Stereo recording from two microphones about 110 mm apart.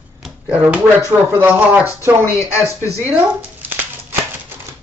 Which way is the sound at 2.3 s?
30° left (ahead or behind).